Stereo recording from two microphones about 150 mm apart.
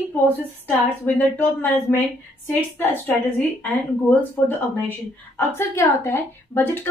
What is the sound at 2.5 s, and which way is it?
Speech, 10° left (ahead or behind).